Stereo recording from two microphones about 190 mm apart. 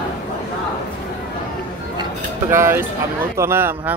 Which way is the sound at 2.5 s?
15° right (ahead or behind).